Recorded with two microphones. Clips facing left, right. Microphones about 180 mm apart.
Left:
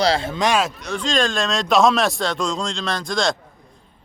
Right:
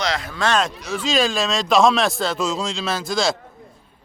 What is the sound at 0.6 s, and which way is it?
Speech, centre (ahead or behind).